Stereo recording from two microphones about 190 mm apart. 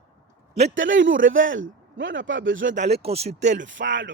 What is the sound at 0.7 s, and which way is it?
A man's voice, 80° right.